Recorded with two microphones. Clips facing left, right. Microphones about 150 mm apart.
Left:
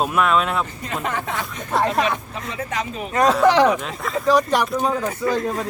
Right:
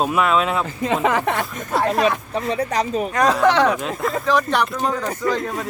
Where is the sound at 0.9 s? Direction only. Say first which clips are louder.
Right 7 dB; 90° right; by 1.5 s 70° right (ahead or behind).